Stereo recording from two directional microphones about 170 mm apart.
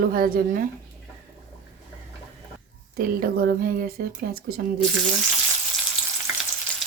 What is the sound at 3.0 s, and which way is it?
A woman's voice, 60° right (ahead or behind).